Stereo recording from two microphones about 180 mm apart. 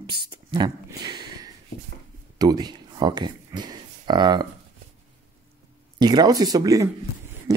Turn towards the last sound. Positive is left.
turn(degrees=-20)  # may be behind; listen again after turning